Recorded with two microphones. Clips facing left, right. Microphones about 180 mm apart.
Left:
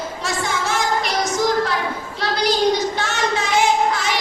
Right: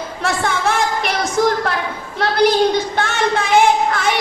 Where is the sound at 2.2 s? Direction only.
55° right (ahead or behind).